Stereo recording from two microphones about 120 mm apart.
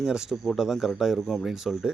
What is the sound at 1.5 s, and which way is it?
Speech, 5° right (ahead or behind).